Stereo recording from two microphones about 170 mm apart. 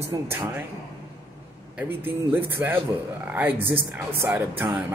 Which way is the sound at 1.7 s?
10° right (ahead or behind).